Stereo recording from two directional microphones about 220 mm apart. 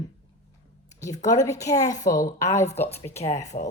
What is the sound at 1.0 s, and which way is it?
A woman's voice, 15° left (ahead or behind).